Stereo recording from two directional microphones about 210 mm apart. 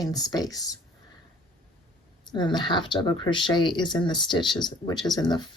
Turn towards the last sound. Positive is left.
turn(degrees=20)  # may be behind; listen again after turning